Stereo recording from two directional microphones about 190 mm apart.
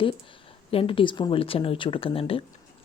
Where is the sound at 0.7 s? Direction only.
30° left (ahead or behind).